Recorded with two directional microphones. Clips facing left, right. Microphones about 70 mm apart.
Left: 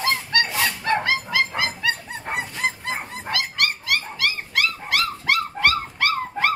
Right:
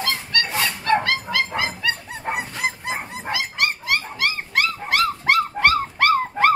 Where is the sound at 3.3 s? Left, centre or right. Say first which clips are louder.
Right 1 dB; right.